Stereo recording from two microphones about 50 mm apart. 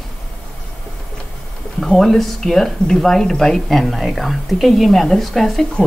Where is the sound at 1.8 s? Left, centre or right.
Centre.